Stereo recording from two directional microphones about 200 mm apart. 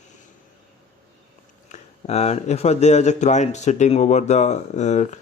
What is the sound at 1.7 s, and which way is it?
Speech, 30° left (ahead or behind).